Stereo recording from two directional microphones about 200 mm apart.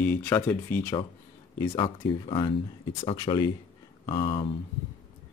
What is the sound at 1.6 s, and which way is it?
Speech, 25° left (ahead or behind).